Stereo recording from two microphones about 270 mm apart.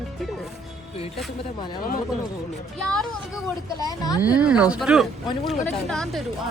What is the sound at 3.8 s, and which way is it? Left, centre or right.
Speech, centre.